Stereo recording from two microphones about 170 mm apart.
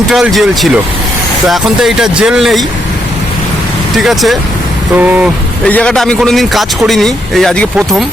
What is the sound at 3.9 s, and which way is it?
A man's voice, centre (ahead or behind).